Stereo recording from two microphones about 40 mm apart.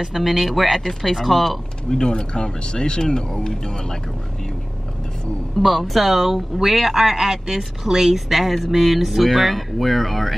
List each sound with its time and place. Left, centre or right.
0.0 s speech: centre
0.7 s speech: centre
2.0 s speech: left
5.6 s speech: centre